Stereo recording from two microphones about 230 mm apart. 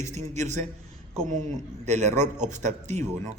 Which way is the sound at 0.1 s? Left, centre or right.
Right.